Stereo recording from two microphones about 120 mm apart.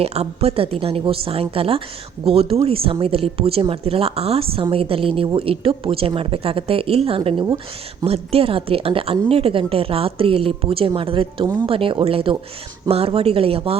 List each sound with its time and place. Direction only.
0.0 s a woman's voice: 60° right (ahead or behind)